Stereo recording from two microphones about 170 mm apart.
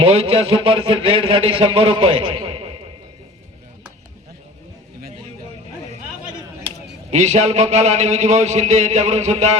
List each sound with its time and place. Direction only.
0.0 s speech: 35° right (ahead or behind)
7.1 s speech: 40° right (ahead or behind)